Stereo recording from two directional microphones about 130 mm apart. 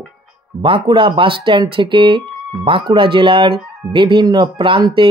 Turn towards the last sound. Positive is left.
turn(degrees=-40)  # may be behind; listen again after turning